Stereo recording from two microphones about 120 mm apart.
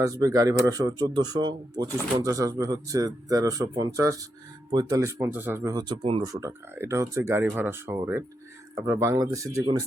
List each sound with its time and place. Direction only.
0.0 s speech: 30° right (ahead or behind)
5.7 s speech: 45° right (ahead or behind)
6.2 s speech: 25° right (ahead or behind)